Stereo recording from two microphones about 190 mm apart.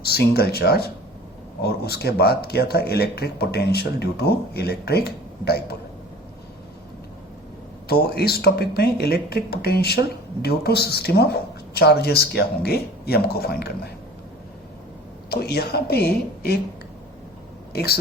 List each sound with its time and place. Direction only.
0.0 s speech: 55° left (ahead or behind)
7.9 s speech: 55° left (ahead or behind)
15.3 s speech: 55° left (ahead or behind)
17.7 s speech: 55° left (ahead or behind)